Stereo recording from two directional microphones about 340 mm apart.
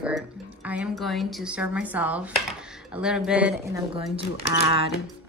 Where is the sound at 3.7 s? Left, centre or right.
Centre.